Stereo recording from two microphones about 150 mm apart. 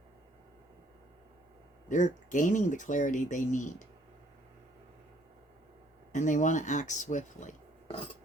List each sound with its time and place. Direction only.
1.9 s speech: 55° left (ahead or behind)
6.1 s speech: 55° left (ahead or behind)